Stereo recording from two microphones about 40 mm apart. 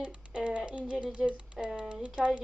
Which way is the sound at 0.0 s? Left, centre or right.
Right.